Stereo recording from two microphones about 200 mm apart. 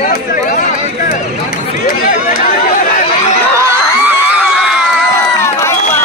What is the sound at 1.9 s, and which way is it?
Speech, 45° left (ahead or behind).